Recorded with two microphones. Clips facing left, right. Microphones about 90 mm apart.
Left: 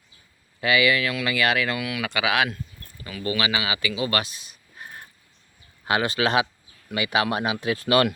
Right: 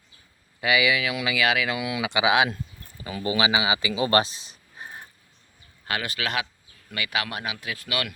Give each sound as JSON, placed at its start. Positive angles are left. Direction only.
{"t": 0.6, "sound": "speech", "side_deg": -10}
{"t": 1.7, "sound": "speech", "side_deg": -20}
{"t": 5.8, "sound": "speech", "side_deg": 25}